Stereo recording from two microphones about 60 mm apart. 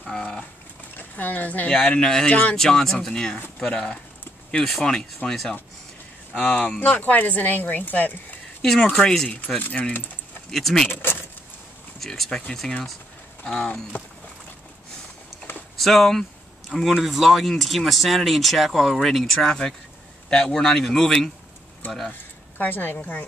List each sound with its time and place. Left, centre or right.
0.0 s speech: centre
0.9 s speech: left
1.9 s speech: centre
2.6 s speech: centre
6.8 s speech: left
8.9 s speech: centre
9.6 s speech: left
10.5 s speech: centre
10.9 s speech: left
12.0 s speech: centre
15.8 s speech: centre
22.6 s a woman's voice: left